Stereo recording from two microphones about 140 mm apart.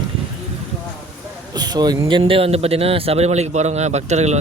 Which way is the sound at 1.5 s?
30° right (ahead or behind).